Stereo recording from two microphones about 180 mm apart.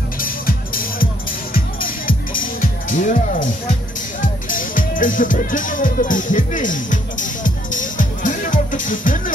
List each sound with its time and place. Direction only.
0.2 s music: 50° left (ahead or behind)